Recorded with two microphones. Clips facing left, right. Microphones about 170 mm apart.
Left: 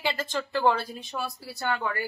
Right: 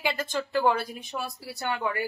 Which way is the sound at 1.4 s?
20° right (ahead or behind).